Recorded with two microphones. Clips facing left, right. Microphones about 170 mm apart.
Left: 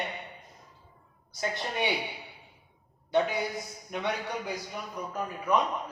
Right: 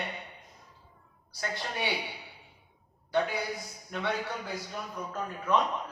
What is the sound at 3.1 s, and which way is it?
A man's voice, 20° left (ahead or behind).